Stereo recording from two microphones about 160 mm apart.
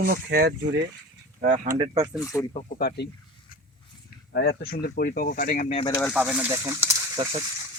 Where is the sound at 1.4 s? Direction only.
55° right (ahead or behind).